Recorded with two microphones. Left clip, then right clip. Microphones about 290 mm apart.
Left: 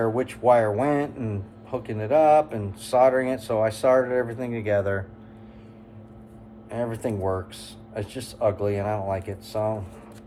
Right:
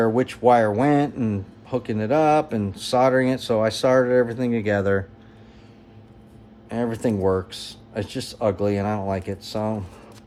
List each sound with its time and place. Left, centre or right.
0.0 s speech: right
6.7 s speech: right